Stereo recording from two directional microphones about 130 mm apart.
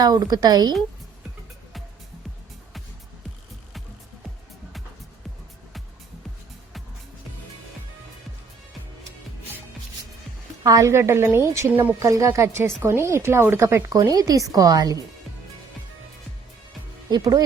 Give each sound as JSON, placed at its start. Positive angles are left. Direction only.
{"t": 0.0, "sound": "a woman's voice", "side_deg": -30}
{"t": 10.6, "sound": "a woman's voice", "side_deg": -30}
{"t": 17.1, "sound": "a woman's voice", "side_deg": -30}